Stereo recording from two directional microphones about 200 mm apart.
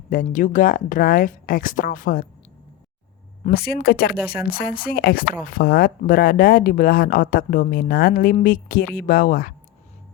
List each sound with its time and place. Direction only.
0.1 s speech: 40° left (ahead or behind)
3.4 s speech: 50° left (ahead or behind)